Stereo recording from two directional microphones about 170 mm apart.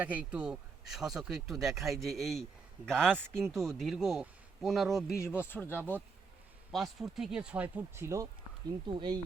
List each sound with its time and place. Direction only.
0.0 s speech: 10° right (ahead or behind)
5.4 s speech: 15° left (ahead or behind)
6.7 s speech: centre (ahead or behind); by 8.3 s 15° right (ahead or behind)
8.9 s speech: 30° right (ahead or behind)